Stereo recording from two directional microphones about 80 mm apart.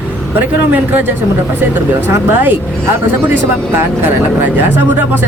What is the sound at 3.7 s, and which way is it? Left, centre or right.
Speech, right.